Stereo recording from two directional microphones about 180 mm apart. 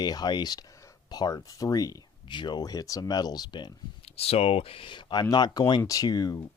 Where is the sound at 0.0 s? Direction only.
20° left (ahead or behind).